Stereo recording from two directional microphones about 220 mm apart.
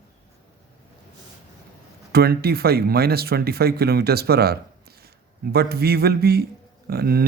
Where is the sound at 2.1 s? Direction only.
45° right (ahead or behind).